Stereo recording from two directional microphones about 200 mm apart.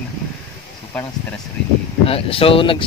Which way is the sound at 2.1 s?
25° left (ahead or behind).